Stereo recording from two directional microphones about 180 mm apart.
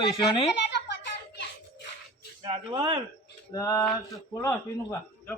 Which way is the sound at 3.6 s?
20° left (ahead or behind).